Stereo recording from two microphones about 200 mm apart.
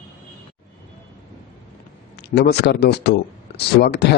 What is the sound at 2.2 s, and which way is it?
Speech, 55° left (ahead or behind).